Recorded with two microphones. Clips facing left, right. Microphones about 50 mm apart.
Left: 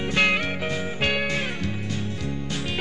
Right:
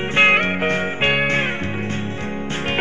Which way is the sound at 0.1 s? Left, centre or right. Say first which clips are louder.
Right 7 dB; right.